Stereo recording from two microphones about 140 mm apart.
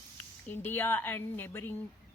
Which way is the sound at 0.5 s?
15° left (ahead or behind).